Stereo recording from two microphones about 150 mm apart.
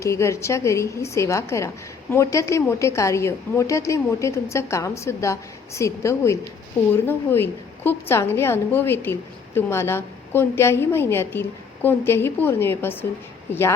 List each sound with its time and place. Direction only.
0.0 s a woman's voice: 20° left (ahead or behind)